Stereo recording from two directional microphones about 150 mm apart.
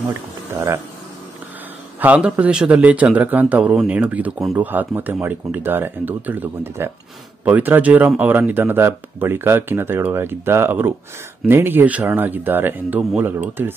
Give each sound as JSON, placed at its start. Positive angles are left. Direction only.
{"t": 0.1, "sound": "speech", "side_deg": -15}
{"t": 2.0, "sound": "a man's voice", "side_deg": -10}